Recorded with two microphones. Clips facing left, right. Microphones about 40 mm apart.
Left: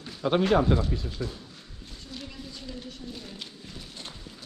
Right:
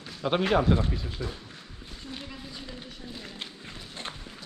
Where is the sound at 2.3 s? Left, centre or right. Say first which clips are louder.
Left 1 dB; centre.